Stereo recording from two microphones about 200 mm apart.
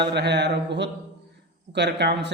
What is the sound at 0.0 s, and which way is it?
Speech, 60° right (ahead or behind).